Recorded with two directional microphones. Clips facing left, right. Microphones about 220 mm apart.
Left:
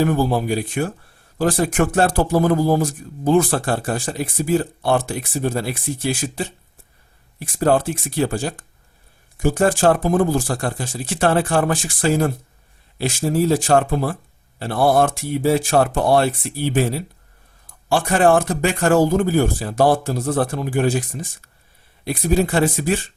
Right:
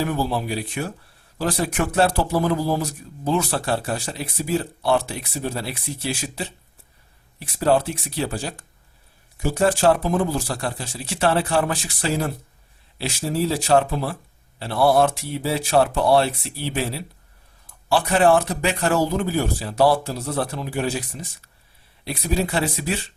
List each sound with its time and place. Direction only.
0.0 s speech: 45° left (ahead or behind)